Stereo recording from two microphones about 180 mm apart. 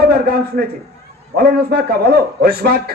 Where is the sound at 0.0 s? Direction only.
60° right (ahead or behind).